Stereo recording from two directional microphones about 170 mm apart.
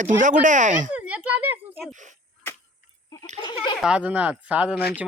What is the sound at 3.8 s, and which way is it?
Speech, 5° right (ahead or behind).